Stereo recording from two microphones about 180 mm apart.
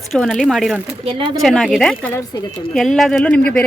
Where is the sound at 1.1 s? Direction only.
30° right (ahead or behind).